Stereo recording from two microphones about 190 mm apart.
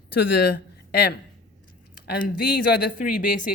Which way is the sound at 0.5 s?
55° left (ahead or behind).